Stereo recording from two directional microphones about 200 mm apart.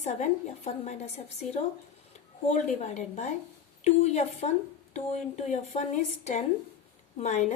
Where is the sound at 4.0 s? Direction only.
35° left (ahead or behind).